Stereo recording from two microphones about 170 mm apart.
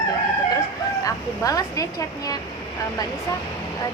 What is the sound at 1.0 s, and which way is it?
Speech, 20° left (ahead or behind).